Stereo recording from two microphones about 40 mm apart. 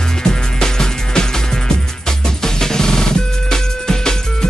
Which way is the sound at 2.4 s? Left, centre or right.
Centre.